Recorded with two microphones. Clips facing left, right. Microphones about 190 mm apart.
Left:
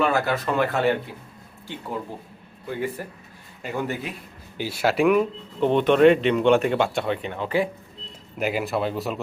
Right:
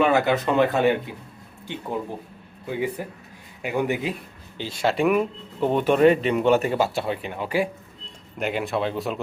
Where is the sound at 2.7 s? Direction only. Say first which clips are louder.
Right 2 dB; 15° right (ahead or behind).